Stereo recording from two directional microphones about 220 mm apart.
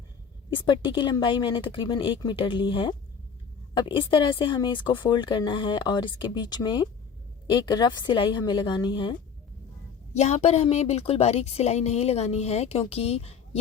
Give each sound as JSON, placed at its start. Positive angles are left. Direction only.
{"t": 0.5, "sound": "speech", "side_deg": 20}
{"t": 10.2, "sound": "speech", "side_deg": 30}